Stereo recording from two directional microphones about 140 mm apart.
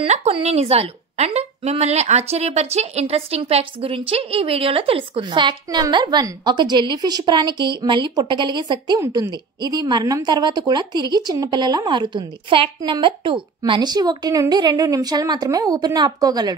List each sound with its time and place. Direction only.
0.0 s a woman's voice: 45° right (ahead or behind); by 16.5 s 30° right (ahead or behind)